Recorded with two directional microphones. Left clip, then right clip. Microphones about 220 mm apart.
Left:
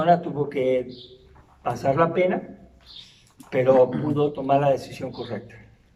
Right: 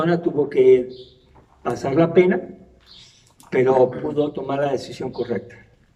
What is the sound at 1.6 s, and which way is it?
Speech, 45° right (ahead or behind).